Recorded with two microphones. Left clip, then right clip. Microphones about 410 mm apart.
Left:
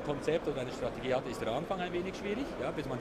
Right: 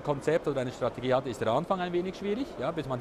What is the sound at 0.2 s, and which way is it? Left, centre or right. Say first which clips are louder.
Speech: right 4 dB; right.